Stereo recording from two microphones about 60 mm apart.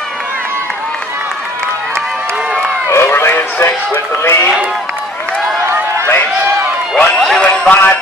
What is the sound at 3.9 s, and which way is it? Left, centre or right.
Music, left.